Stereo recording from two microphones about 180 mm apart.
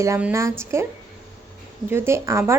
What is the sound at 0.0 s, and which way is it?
Speech, 10° right (ahead or behind).